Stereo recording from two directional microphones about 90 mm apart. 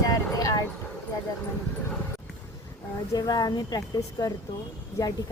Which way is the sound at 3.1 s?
50° left (ahead or behind).